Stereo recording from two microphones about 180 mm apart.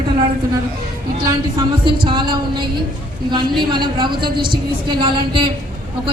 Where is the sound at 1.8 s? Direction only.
25° right (ahead or behind).